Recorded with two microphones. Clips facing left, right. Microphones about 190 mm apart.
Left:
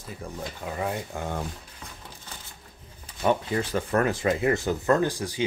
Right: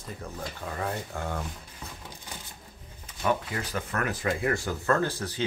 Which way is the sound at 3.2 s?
25° left (ahead or behind).